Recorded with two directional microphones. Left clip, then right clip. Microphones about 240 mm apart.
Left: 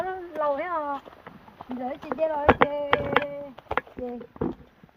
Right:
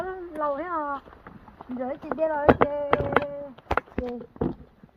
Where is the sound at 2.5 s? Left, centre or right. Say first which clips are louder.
Even; right.